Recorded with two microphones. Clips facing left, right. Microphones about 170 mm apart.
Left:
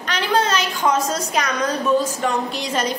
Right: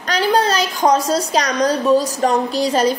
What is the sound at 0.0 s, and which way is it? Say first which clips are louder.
A woman's voice: right 4 dB; 35° right (ahead or behind).